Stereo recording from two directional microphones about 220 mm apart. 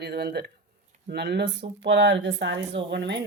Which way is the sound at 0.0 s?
50° right (ahead or behind).